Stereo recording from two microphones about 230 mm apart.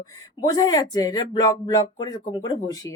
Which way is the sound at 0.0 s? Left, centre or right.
Centre.